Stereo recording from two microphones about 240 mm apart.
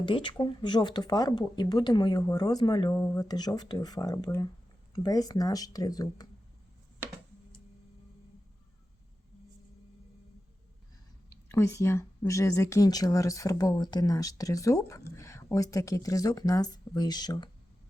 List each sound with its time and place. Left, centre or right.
0.0 s speech: centre
11.3 s speech: centre